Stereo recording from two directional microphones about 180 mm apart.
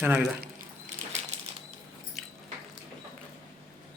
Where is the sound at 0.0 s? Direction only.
5° right (ahead or behind).